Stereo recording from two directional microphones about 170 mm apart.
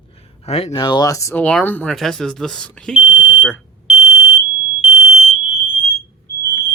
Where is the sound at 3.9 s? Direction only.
35° left (ahead or behind).